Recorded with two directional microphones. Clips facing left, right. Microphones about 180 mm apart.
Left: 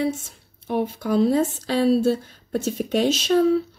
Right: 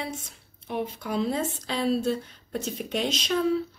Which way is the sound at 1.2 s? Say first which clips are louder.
Left 8 dB; 55° left (ahead or behind).